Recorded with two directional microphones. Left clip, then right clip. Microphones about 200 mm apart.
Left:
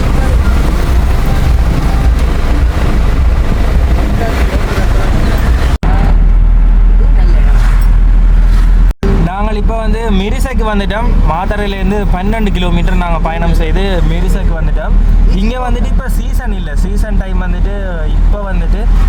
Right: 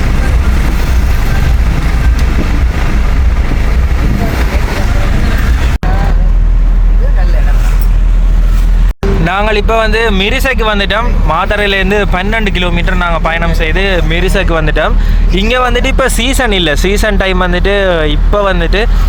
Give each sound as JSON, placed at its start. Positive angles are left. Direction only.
{"t": 9.0, "sound": "speech", "side_deg": -5}
{"t": 14.3, "sound": "speech", "side_deg": -10}
{"t": 16.8, "sound": "speech", "side_deg": -40}
{"t": 17.2, "sound": "speech", "side_deg": -15}